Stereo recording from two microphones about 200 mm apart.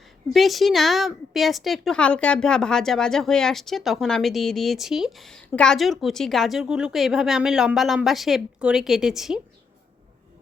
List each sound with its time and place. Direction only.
0.3 s a woman's voice: centre (ahead or behind)